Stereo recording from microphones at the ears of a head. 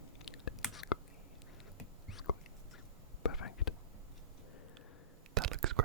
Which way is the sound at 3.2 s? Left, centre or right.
Left.